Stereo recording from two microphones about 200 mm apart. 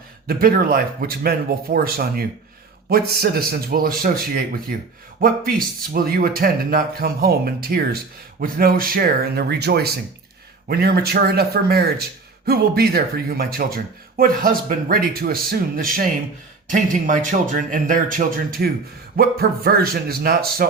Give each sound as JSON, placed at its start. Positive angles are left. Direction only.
{"t": 0.3, "sound": "speech", "side_deg": -45}